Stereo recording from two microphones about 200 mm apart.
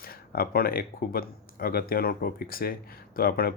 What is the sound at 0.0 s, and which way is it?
Speech, 50° left (ahead or behind).